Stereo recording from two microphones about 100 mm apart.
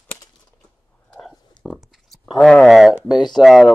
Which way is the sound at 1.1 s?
5° left (ahead or behind).